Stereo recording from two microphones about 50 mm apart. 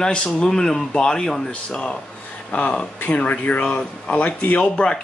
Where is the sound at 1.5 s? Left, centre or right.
Left.